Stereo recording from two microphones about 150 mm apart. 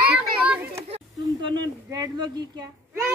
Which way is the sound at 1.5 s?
25° right (ahead or behind).